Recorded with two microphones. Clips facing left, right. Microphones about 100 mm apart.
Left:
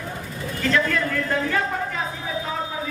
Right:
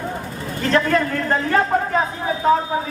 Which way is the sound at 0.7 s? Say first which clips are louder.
Right 5 dB; 45° right (ahead or behind).